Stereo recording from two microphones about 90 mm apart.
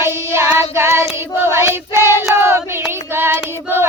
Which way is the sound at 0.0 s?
30° right (ahead or behind).